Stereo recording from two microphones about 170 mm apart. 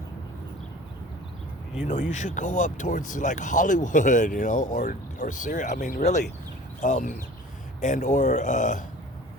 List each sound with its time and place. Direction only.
2.0 s speech: 45° left (ahead or behind)